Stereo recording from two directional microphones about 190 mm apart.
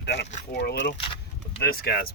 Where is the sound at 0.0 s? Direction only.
60° left (ahead or behind).